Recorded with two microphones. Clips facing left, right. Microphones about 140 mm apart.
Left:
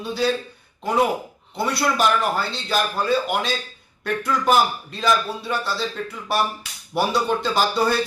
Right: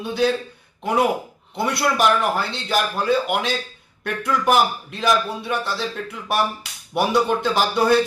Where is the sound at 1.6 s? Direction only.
15° right (ahead or behind).